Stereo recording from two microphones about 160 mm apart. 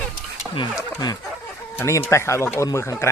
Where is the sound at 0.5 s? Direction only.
25° left (ahead or behind).